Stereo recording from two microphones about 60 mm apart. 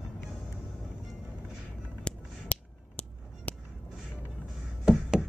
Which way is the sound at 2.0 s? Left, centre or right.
Left.